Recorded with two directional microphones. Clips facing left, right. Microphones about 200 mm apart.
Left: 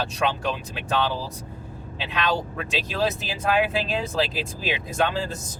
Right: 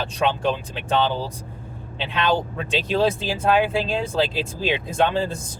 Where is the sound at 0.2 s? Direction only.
30° right (ahead or behind).